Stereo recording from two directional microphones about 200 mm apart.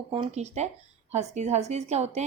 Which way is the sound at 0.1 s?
30° right (ahead or behind).